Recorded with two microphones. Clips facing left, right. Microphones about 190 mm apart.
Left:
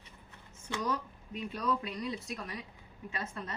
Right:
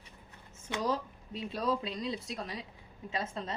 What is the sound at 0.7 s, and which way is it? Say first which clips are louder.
Speech: right 2 dB; 30° right (ahead or behind).